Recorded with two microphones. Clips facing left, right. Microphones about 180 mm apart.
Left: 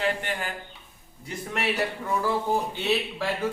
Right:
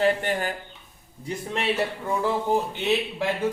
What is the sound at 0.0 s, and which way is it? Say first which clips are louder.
Speech: right 5 dB; 40° right (ahead or behind).